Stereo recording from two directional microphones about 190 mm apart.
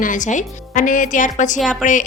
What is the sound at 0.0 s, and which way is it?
A woman's voice, 40° left (ahead or behind).